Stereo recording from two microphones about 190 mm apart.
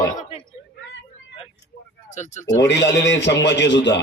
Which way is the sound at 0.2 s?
35° left (ahead or behind).